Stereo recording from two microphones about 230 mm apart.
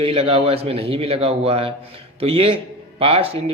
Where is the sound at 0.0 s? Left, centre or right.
Right.